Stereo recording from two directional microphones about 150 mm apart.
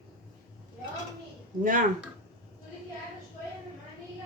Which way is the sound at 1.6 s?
65° right (ahead or behind).